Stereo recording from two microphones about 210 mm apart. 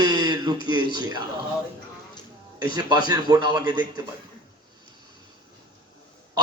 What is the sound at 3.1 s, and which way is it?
Speech, 20° right (ahead or behind).